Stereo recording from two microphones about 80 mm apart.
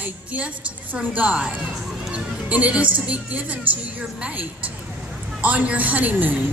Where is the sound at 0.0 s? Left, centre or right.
Centre.